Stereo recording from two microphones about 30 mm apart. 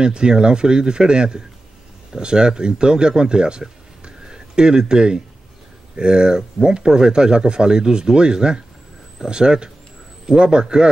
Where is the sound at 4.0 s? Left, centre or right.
Right.